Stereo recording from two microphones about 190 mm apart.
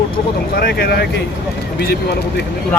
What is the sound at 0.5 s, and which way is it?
Speech, 55° left (ahead or behind).